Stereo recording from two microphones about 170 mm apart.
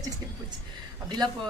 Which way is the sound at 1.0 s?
25° right (ahead or behind).